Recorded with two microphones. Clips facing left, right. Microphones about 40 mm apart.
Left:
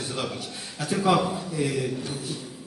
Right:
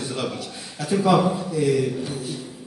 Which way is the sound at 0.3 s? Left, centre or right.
Centre.